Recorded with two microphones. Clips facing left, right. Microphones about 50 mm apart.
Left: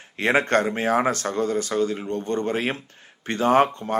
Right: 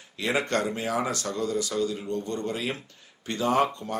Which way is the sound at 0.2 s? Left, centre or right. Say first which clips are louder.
Left 6 dB; left.